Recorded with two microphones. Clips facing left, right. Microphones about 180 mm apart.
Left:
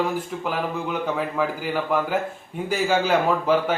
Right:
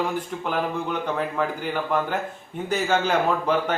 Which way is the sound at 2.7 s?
10° left (ahead or behind).